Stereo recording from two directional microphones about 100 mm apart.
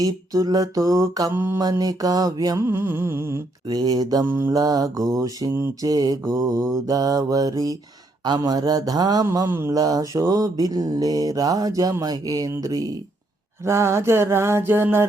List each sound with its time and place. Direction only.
0.0 s mantra: 35° right (ahead or behind)
1.3 s mantra: 25° right (ahead or behind)
1.6 s mantra: 40° right (ahead or behind)
3.7 s mantra: 40° right (ahead or behind)
4.3 s mantra: 20° right (ahead or behind)
4.5 s mantra: 40° right (ahead or behind)
9.5 s mantra: 25° right (ahead or behind)
9.7 s mantra: 40° right (ahead or behind); by 15.0 s 20° right (ahead or behind)